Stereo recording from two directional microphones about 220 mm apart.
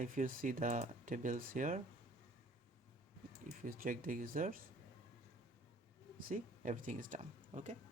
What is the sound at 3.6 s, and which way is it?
Speech, 40° right (ahead or behind).